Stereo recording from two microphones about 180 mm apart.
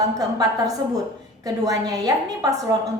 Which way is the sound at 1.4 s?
20° right (ahead or behind).